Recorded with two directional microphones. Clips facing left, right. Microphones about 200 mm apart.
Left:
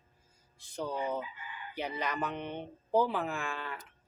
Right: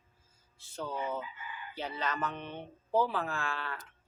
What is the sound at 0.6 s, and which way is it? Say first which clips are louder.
Speech: left 2 dB; 15° left (ahead or behind).